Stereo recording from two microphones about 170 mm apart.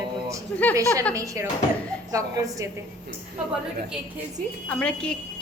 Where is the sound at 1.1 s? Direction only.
20° right (ahead or behind).